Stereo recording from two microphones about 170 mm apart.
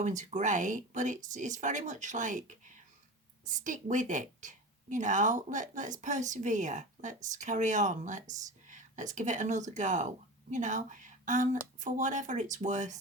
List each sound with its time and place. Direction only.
0.0 s a woman's voice: 45° right (ahead or behind)